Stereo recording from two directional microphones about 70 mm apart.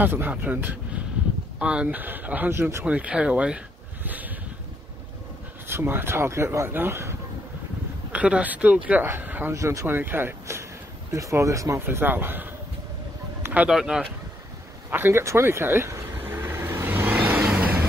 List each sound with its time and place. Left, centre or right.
0.0 s speech: right
2.5 s speech: right
2.8 s speech: centre
5.7 s speech: right
8.1 s speech: centre
9.5 s speech: right
9.8 s speech: right
11.1 s speech: right
11.8 s speech: right
13.7 s speech: centre
14.9 s vehicle: right; by 17.7 s centre